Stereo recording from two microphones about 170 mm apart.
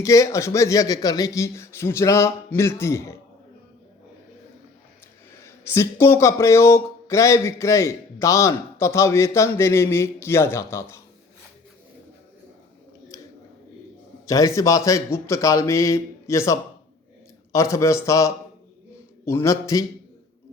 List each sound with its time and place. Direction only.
0.0 s speech: 20° left (ahead or behind)
5.4 s speech: 15° left (ahead or behind)
14.3 s speech: 20° left (ahead or behind)